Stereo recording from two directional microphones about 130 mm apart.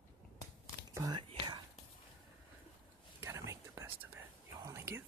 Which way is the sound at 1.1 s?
40° right (ahead or behind).